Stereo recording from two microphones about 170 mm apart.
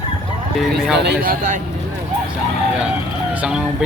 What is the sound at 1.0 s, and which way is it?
Speech, 65° right (ahead or behind).